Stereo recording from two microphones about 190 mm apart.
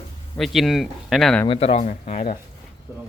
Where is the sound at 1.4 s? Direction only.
30° left (ahead or behind).